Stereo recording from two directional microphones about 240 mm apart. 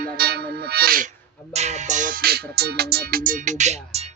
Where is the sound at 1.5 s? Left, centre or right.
Right.